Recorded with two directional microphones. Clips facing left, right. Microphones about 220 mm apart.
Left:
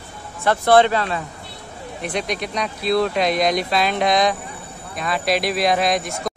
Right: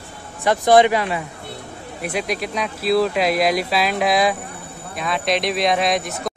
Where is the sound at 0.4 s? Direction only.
15° right (ahead or behind).